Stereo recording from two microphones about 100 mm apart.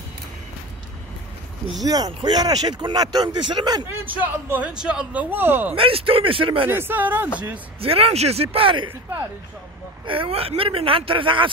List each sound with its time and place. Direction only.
1.8 s speech: 40° right (ahead or behind)
4.0 s speech: 20° right (ahead or behind)
5.8 s speech: 65° right (ahead or behind)
6.7 s speech: 20° right (ahead or behind)
7.8 s speech: 75° right (ahead or behind)
10.0 s speech: 60° right (ahead or behind)